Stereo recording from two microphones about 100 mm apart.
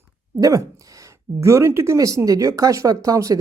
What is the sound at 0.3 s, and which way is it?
Speech, 35° right (ahead or behind).